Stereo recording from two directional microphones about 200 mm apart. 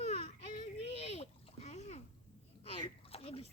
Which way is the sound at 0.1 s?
30° left (ahead or behind).